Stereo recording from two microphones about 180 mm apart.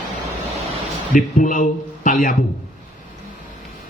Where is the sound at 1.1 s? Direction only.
45° left (ahead or behind).